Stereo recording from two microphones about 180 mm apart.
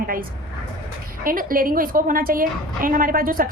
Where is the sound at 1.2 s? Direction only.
50° right (ahead or behind).